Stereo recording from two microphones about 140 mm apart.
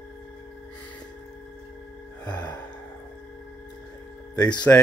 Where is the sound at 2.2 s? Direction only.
30° left (ahead or behind).